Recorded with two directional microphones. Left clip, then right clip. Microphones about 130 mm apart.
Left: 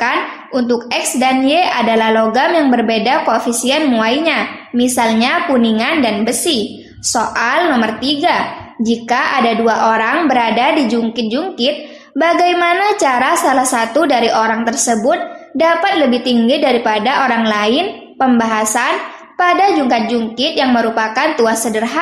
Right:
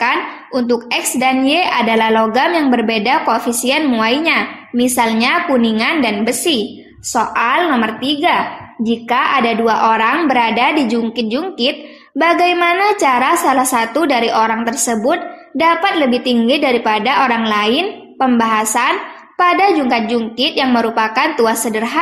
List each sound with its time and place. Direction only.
0.6 s a woman's voice: 25° right (ahead or behind)